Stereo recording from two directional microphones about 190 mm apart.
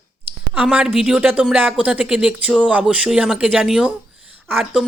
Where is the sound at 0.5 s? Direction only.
5° right (ahead or behind).